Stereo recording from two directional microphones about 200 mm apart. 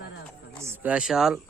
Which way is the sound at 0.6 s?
10° right (ahead or behind).